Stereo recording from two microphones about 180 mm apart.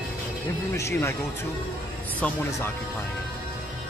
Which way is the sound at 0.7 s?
15° left (ahead or behind).